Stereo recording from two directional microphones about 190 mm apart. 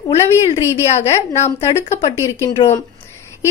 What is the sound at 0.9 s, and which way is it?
Speech, 35° left (ahead or behind).